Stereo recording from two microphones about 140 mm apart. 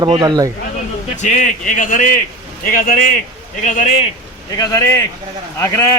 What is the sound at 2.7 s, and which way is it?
Speech, 80° left.